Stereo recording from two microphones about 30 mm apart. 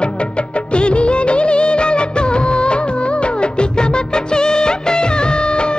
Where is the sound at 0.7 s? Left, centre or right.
Left.